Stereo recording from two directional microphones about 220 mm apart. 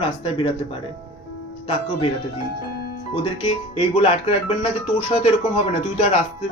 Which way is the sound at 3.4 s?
20° left (ahead or behind).